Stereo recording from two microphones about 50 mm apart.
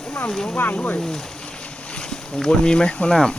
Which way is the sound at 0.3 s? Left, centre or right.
Centre.